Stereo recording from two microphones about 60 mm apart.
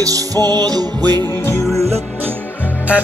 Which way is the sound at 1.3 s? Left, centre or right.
Left.